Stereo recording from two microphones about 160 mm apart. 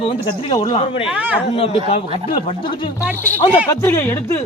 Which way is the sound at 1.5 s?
40° left (ahead or behind).